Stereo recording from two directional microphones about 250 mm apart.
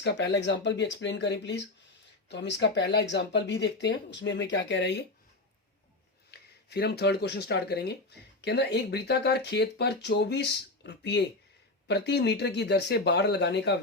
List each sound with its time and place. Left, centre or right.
0.0 s speech: left
6.3 s speech: left